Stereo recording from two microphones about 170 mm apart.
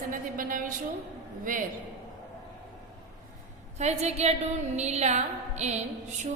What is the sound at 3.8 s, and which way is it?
A woman's voice, 40° right (ahead or behind).